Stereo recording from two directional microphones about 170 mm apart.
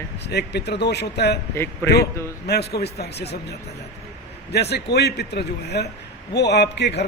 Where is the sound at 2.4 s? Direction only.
70° left (ahead or behind).